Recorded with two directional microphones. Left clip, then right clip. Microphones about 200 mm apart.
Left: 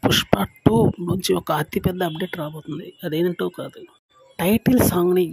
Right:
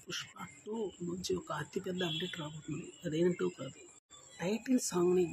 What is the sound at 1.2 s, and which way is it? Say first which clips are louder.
Speech: left 17 dB; 50° left (ahead or behind).